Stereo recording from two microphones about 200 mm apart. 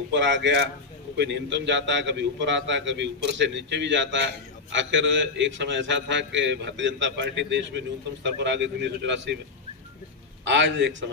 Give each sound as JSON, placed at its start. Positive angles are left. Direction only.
{"t": 0.1, "sound": "a man's voice", "side_deg": -65}
{"t": 10.4, "sound": "a man's voice", "side_deg": -65}